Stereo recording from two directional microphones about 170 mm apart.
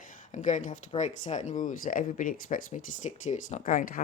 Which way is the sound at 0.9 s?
45° left (ahead or behind).